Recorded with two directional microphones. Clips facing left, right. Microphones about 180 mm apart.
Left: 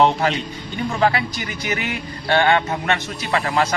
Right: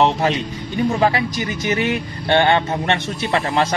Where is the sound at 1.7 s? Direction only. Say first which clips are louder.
Right 5 dB; 25° right (ahead or behind).